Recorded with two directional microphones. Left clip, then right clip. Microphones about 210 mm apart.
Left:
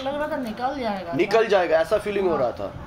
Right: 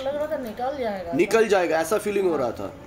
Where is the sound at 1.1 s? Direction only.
50° right (ahead or behind).